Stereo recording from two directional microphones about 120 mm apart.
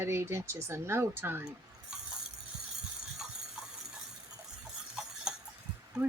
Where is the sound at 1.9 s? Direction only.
5° right (ahead or behind).